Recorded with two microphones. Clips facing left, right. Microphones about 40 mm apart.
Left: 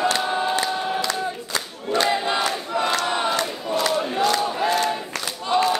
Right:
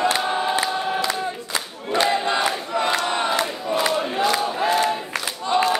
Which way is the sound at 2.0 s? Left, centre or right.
Centre.